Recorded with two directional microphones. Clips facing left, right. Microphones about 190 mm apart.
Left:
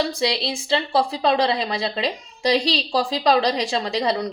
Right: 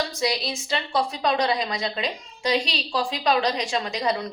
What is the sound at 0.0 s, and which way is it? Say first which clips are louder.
A woman's voice: left 3 dB; 30° left (ahead or behind).